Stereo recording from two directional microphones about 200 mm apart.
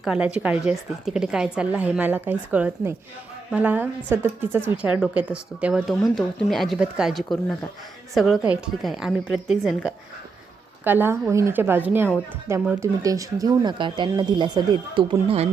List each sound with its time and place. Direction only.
0.0 s a woman's voice: 5° right (ahead or behind); by 15.4 s 25° right (ahead or behind)